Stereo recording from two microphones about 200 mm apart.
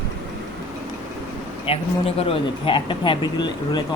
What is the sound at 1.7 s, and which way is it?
Speech, 30° left (ahead or behind).